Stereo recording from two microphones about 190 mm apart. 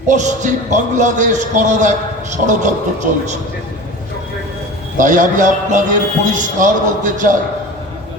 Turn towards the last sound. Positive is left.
turn(degrees=-40)  # may be behind; listen again after turning